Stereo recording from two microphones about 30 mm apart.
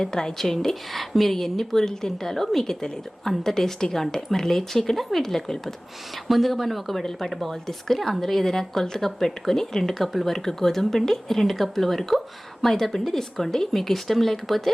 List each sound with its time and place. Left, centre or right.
0.0 s a woman's voice: centre
6.2 s a woman's voice: centre
10.1 s a woman's voice: centre
10.3 s a woman's voice: centre